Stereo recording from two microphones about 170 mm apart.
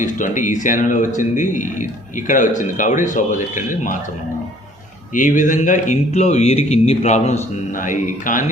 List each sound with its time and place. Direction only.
0.0 s speech: 45° left (ahead or behind)
5.1 s speech: 50° left (ahead or behind)